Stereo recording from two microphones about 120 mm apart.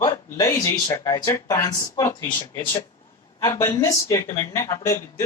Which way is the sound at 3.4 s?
25° left (ahead or behind).